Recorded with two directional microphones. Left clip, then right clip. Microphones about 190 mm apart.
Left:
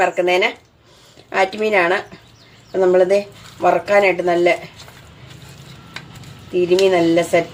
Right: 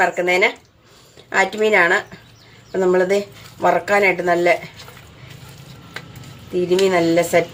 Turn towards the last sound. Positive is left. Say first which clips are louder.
# left 1 dB
turn(degrees=-15)  # may be behind; listen again after turning